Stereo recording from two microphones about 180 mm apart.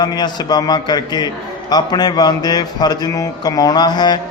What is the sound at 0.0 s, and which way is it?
A man's voice, 20° left (ahead or behind).